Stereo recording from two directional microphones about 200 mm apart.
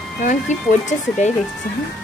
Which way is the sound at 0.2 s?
40° left (ahead or behind).